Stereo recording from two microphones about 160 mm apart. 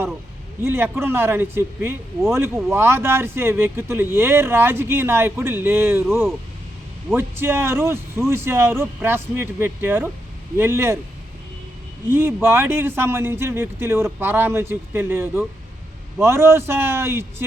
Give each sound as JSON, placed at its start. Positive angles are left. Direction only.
{"t": 0.6, "sound": "speech", "side_deg": -15}
{"t": 12.0, "sound": "speech", "side_deg": -15}